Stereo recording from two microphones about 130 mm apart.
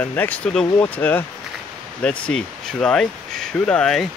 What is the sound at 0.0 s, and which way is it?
Speech, 15° left (ahead or behind).